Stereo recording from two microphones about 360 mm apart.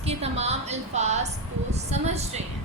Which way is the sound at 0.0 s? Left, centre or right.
Centre.